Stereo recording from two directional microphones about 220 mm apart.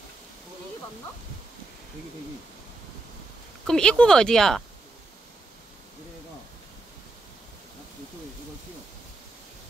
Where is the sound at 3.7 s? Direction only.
5° left (ahead or behind).